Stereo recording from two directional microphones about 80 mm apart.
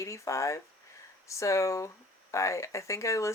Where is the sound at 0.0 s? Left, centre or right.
Left.